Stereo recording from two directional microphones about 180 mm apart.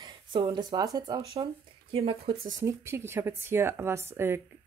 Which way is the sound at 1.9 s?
30° right (ahead or behind).